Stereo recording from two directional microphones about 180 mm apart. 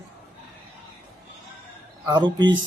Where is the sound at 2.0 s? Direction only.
25° right (ahead or behind).